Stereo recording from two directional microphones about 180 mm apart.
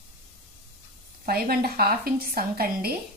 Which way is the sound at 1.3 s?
55° right (ahead or behind).